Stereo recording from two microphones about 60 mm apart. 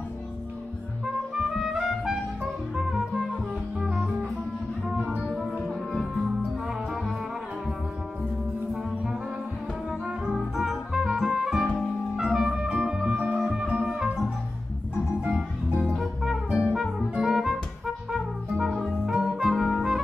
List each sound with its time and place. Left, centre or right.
1.6 s music: centre
5.2 s music: centre
9.8 s music: centre
13.7 s music: centre
15.2 s music: centre